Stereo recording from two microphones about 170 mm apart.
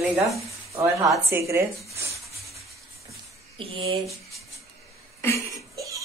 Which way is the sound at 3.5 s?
30° right (ahead or behind).